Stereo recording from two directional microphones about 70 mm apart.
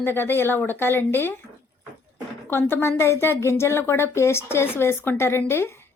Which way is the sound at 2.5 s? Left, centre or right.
Left.